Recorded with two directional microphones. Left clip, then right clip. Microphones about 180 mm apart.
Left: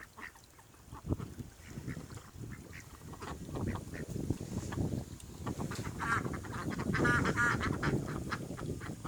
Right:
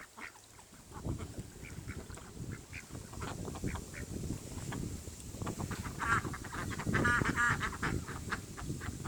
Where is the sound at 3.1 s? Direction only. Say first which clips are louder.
Left 1 dB; 10° right (ahead or behind).